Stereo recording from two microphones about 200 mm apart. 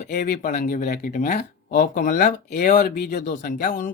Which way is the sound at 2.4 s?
50° left (ahead or behind).